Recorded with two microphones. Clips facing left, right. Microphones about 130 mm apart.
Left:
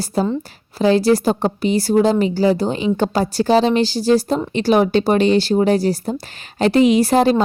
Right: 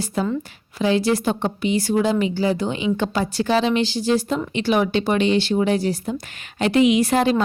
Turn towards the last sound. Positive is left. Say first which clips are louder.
# left 4 dB
turn(degrees=35)  # may be behind; listen again after turning